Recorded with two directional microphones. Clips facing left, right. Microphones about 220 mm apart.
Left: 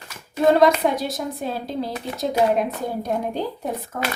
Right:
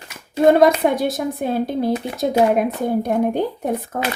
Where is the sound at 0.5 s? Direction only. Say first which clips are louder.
Right 3 dB; 55° right (ahead or behind).